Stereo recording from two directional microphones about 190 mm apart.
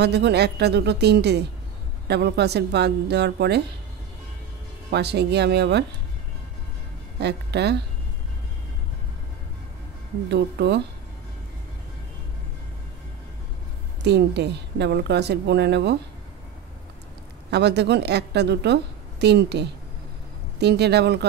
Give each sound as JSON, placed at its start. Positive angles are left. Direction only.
{"t": 0.0, "sound": "a woman's voice", "side_deg": -60}
{"t": 4.9, "sound": "a woman's voice", "side_deg": -60}
{"t": 7.2, "sound": "speech", "side_deg": -60}
{"t": 10.3, "sound": "a woman's voice", "side_deg": -60}
{"t": 14.0, "sound": "a woman's voice", "side_deg": -65}
{"t": 17.5, "sound": "a woman's voice", "side_deg": -60}